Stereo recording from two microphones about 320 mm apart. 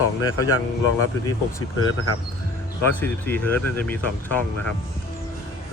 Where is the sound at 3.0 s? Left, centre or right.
Centre.